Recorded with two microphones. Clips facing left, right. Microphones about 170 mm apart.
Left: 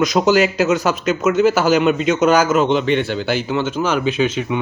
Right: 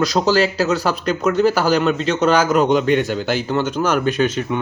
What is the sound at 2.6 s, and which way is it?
A man's voice, 45° right (ahead or behind).